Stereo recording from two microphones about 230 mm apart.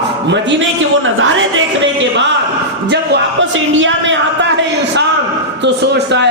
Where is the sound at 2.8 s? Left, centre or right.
Right.